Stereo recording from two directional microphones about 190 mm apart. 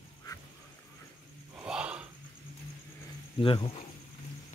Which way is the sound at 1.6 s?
5° right (ahead or behind).